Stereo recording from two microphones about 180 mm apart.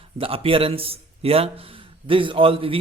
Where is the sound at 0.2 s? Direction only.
30° right (ahead or behind).